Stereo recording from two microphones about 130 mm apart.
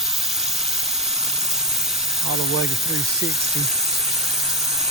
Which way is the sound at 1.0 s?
55° right (ahead or behind).